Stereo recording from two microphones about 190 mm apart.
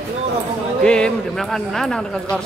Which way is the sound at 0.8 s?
5° left (ahead or behind).